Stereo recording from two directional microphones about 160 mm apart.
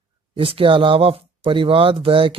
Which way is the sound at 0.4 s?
35° right (ahead or behind).